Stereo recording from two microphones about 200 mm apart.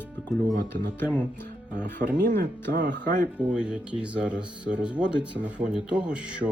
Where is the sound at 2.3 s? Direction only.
50° right (ahead or behind).